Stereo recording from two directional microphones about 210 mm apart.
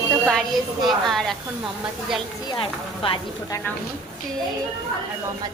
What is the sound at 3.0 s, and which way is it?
Speech, 25° left (ahead or behind).